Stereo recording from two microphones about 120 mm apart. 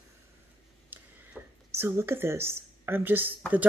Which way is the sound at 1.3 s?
5° right (ahead or behind).